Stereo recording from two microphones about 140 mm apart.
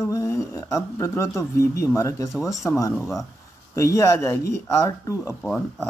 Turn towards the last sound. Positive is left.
turn(degrees=5)  # may be behind; listen again after turning